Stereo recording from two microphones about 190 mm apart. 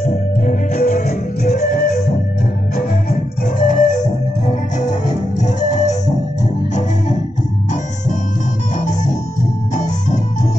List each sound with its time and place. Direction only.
0.0 s music: 40° left (ahead or behind)
8.7 s music: 40° left (ahead or behind)